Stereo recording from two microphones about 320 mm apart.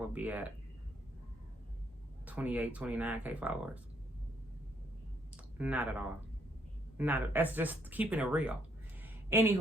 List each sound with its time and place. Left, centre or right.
0.1 s speech: centre
2.2 s speech: centre
5.5 s speech: centre
9.0 s a sound: centre